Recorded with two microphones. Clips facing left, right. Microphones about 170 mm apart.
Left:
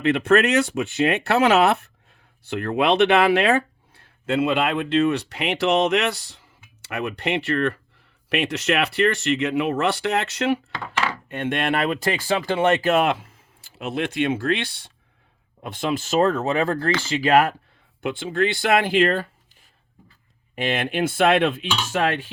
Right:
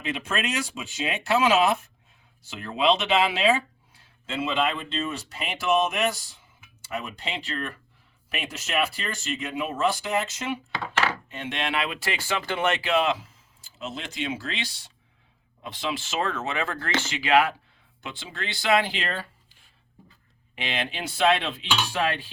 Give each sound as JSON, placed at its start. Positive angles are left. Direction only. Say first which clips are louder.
{"t": 0.0, "sound": "speech", "louder": "left 12 dB", "side_deg": 65}
{"t": 11.3, "sound": "speech", "louder": "left 7 dB", "side_deg": 55}
{"t": 18.0, "sound": "speech", "louder": "left 14 dB", "side_deg": 55}
{"t": 20.6, "sound": "speech", "louder": "left 8 dB", "side_deg": 50}